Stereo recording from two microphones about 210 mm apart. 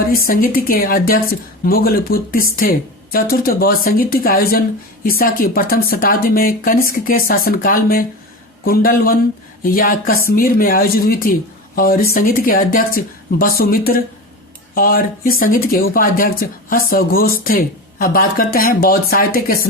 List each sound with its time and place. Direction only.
0.1 s speech: 45° left (ahead or behind)